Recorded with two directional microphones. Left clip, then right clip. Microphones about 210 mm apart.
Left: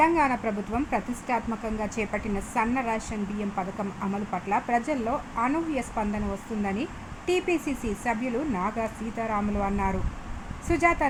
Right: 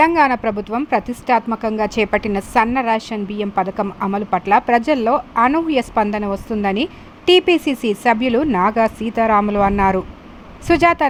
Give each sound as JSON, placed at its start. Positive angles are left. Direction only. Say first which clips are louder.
{"t": 0.0, "sound": "a woman's voice", "louder": "right 9 dB", "side_deg": -45}